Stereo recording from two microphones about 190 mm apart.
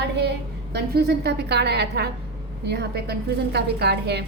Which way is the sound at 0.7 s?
55° right (ahead or behind).